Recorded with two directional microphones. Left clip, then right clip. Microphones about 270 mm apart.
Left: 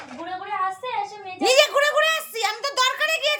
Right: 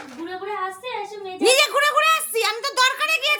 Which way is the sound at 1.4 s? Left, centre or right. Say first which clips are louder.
Even; centre.